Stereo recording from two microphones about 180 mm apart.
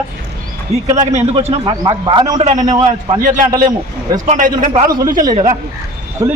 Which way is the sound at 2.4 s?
40° right (ahead or behind).